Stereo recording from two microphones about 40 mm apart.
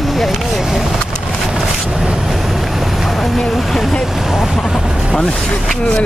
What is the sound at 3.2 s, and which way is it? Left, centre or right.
Speech, centre.